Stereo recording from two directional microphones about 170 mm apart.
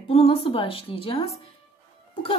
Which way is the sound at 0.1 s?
35° left (ahead or behind).